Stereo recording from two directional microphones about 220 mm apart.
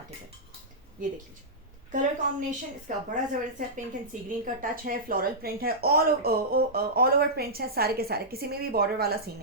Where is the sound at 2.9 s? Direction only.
35° right (ahead or behind).